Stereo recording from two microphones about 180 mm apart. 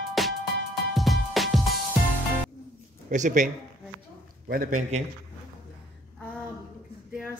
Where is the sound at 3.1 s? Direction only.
45° right (ahead or behind).